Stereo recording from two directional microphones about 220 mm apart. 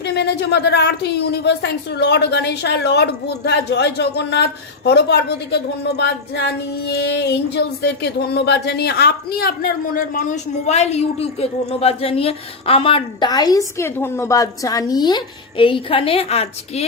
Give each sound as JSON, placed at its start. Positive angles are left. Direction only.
{"t": 0.0, "sound": "a woman's voice", "side_deg": 50}